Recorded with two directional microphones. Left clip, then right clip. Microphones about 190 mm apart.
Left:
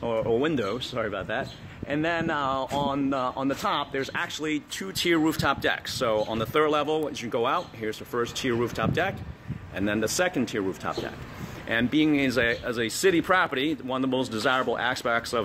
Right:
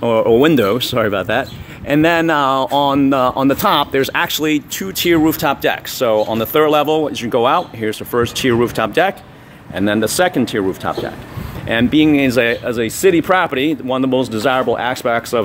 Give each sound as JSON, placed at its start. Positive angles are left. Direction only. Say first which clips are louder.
{"t": 0.0, "sound": "speech", "louder": "right 13 dB", "side_deg": -60}
{"t": 4.7, "sound": "speech", "louder": "right 7 dB", "side_deg": -20}
{"t": 9.8, "sound": "speech", "louder": "right 11 dB", "side_deg": -25}